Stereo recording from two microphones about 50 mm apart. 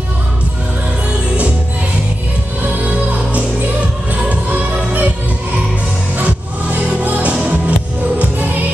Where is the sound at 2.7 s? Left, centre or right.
Right.